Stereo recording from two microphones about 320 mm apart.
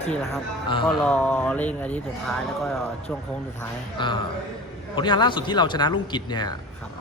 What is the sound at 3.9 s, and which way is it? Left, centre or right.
A man's voice, centre.